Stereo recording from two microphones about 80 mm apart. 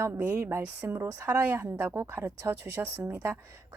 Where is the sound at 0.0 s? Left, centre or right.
Right.